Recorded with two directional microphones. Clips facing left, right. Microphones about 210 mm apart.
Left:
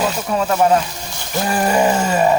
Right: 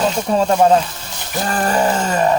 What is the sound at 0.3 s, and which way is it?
Speech, 30° right (ahead or behind).